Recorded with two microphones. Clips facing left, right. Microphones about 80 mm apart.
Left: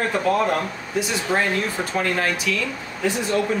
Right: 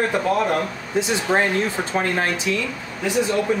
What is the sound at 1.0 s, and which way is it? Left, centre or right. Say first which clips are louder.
Speech: right 3 dB; right.